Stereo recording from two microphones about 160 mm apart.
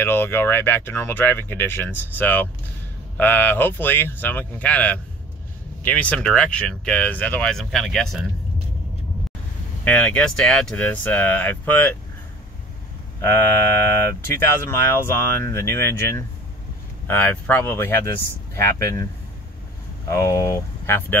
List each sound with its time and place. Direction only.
0.0 s speech: 15° left (ahead or behind)
9.8 s speech: 10° left (ahead or behind)
13.2 s speech: 15° left (ahead or behind)
20.1 s speech: 20° left (ahead or behind)